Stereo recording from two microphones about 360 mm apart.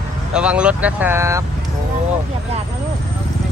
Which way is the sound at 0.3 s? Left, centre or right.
Centre.